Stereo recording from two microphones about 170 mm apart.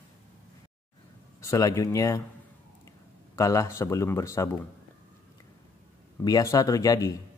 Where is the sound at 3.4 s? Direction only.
20° left (ahead or behind).